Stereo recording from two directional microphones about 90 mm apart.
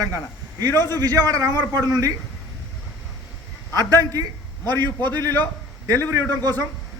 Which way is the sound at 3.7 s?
45° right (ahead or behind).